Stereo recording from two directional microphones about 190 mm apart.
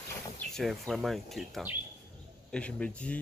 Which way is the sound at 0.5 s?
Centre (ahead or behind).